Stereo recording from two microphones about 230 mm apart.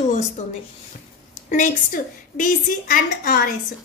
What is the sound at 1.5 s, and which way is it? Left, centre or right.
A woman's voice, left.